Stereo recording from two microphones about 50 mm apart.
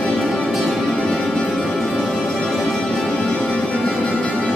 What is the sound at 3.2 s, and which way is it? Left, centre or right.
Music, centre.